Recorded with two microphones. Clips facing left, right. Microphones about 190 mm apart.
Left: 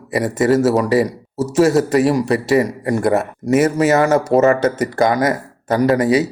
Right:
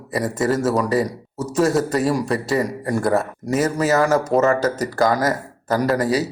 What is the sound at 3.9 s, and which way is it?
Speech, 25° left (ahead or behind).